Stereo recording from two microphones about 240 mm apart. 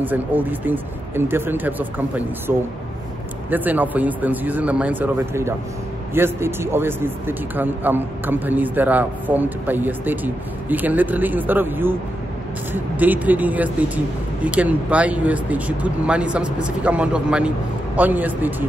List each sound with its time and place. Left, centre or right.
0.0 s a man's voice: centre